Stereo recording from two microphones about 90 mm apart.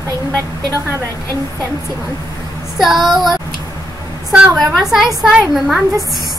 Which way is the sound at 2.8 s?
5° right (ahead or behind).